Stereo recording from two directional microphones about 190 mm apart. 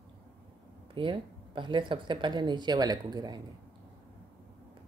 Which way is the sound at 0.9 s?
25° right (ahead or behind).